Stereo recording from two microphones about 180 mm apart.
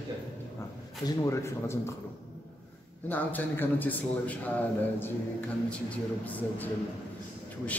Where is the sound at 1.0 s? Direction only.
20° left (ahead or behind).